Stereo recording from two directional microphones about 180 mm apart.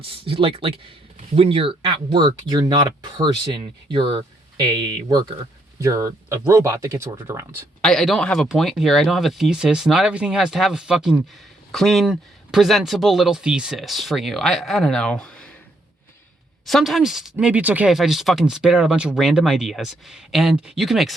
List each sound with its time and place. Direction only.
0.0 s speech: 30° right (ahead or behind); by 7.7 s 15° right (ahead or behind)
7.8 s speech: 5° left (ahead or behind)
16.6 s speech: centre (ahead or behind)